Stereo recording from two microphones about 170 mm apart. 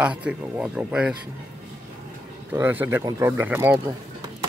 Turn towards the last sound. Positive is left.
turn(degrees=-15)  # may be behind; listen again after turning